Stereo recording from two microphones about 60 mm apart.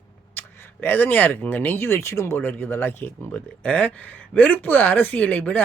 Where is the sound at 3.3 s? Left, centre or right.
Left.